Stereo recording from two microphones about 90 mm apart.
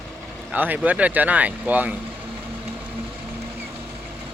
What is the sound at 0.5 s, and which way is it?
Speech, 20° right (ahead or behind).